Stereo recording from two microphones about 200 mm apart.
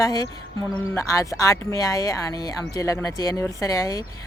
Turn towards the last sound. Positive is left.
turn(degrees=15)  # may be behind; listen again after turning